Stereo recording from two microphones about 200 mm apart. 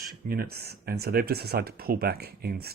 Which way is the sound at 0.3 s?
50° right (ahead or behind).